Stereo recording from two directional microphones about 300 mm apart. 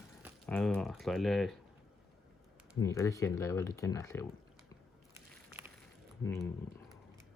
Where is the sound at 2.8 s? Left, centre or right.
Centre.